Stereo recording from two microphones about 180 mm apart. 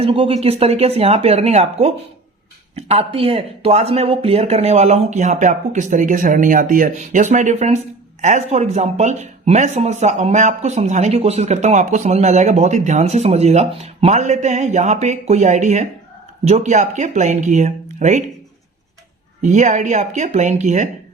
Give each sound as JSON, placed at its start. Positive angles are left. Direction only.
{"t": 0.0, "sound": "speech", "side_deg": -30}
{"t": 19.4, "sound": "speech", "side_deg": -40}